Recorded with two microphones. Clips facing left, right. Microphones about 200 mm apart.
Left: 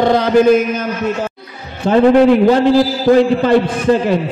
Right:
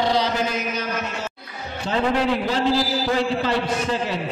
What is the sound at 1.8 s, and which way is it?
Speech, 55° left (ahead or behind).